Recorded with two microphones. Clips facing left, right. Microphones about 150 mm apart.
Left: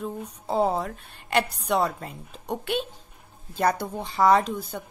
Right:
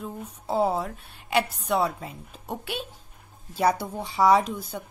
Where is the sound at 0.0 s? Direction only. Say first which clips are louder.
Left 3 dB; 5° right (ahead or behind).